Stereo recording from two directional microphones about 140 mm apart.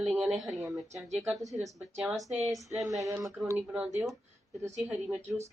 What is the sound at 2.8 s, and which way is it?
Speech, 25° right (ahead or behind).